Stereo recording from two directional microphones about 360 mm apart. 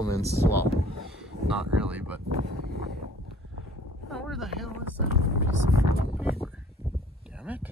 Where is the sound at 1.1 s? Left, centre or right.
Centre.